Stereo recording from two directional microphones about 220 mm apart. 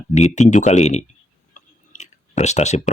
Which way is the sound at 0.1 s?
30° left (ahead or behind).